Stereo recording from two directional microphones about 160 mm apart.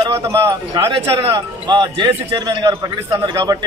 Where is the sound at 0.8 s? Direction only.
35° right (ahead or behind).